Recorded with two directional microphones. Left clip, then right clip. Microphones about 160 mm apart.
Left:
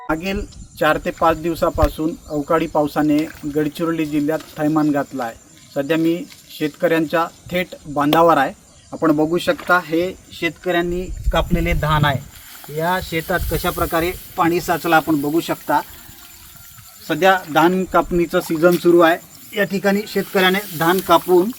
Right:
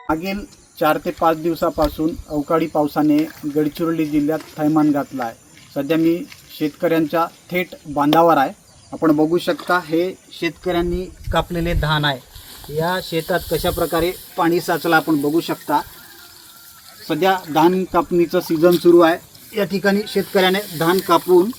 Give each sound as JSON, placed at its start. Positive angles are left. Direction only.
{"t": 0.1, "sound": "speech", "side_deg": 5}
{"t": 17.1, "sound": "speech", "side_deg": 5}